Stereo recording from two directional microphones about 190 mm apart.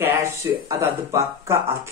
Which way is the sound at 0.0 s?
15° right (ahead or behind).